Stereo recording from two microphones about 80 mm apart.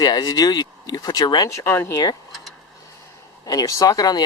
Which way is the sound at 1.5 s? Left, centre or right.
Left.